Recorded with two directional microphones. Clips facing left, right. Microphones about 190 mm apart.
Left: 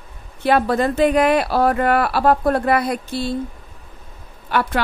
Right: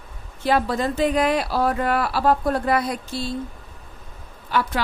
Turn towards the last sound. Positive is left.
turn(degrees=60)  # may be behind; listen again after turning